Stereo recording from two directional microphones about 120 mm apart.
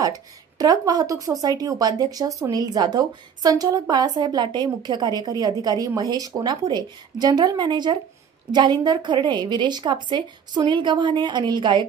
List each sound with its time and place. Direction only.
0.0 s a woman's voice: 30° right (ahead or behind)